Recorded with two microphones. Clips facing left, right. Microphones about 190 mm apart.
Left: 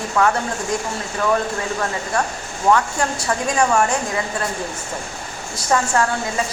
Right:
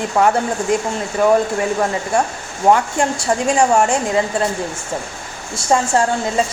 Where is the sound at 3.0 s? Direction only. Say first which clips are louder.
Right 4 dB; 25° right (ahead or behind).